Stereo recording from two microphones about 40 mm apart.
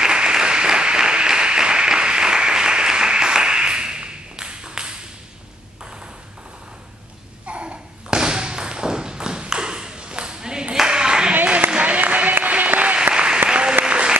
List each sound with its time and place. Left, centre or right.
0.0 s applause: centre
7.4 s thump: right
11.7 s applause: right
13.1 s applause: right